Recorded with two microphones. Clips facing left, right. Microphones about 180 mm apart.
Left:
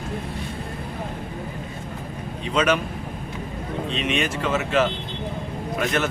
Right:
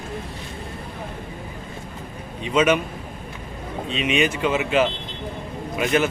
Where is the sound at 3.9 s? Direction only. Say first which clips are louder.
Right 5 dB; 5° right (ahead or behind).